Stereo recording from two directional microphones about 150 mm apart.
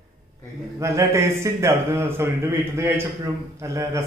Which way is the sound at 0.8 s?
20° right (ahead or behind).